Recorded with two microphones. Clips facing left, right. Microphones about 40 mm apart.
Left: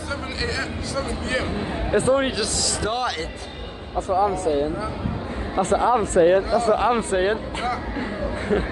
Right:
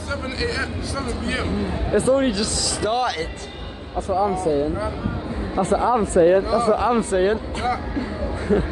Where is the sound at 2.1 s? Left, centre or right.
Left.